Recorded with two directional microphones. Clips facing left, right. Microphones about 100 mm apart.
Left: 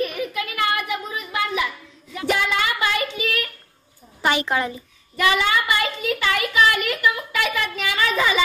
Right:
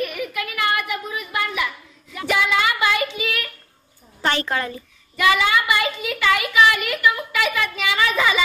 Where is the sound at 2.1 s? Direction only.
35° left (ahead or behind).